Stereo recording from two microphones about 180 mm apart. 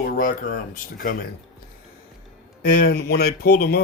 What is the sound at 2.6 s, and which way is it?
Speech, 55° left (ahead or behind).